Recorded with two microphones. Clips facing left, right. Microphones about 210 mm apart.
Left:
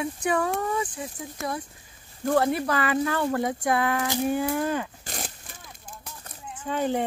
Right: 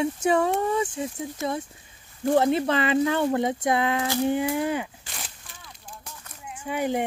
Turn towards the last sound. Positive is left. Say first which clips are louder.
# even
turn(degrees=-15)  # may be behind; listen again after turning